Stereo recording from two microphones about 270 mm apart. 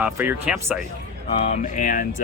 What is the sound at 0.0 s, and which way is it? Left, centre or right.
Speech, centre.